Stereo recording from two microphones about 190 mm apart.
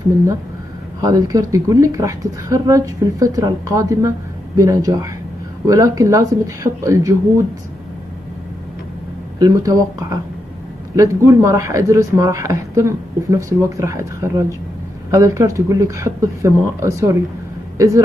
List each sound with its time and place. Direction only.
1.0 s speech: 20° right (ahead or behind)
9.4 s speech: 20° right (ahead or behind)